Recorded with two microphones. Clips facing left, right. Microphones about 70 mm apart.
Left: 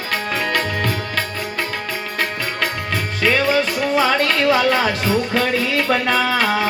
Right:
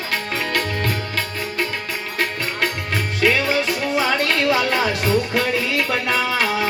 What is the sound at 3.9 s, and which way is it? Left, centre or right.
Music, left.